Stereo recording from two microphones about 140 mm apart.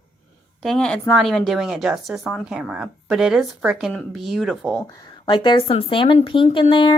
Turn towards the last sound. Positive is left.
turn(degrees=35)  # may be behind; listen again after turning